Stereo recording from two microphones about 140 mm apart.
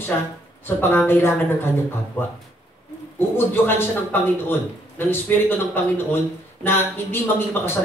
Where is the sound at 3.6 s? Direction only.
15° left (ahead or behind).